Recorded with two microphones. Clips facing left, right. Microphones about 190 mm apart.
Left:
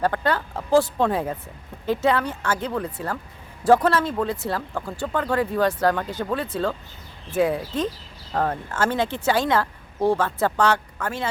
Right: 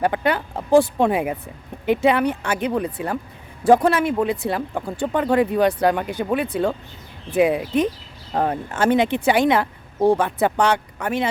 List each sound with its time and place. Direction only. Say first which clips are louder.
0.0 s speech: right 2 dB; 15° right (ahead or behind)